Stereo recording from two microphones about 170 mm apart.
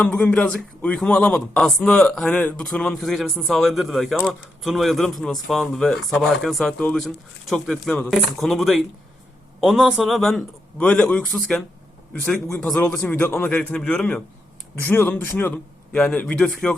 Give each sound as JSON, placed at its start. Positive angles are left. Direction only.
{"t": 0.0, "sound": "a man's voice", "side_deg": 10}